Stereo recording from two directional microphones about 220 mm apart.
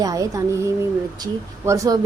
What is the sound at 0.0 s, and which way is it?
A woman's voice, 15° right (ahead or behind).